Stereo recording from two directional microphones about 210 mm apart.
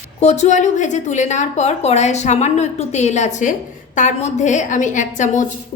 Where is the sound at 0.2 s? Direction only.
30° left (ahead or behind).